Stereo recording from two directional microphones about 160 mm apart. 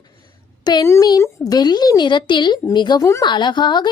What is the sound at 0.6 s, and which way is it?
A woman's voice, 25° left (ahead or behind).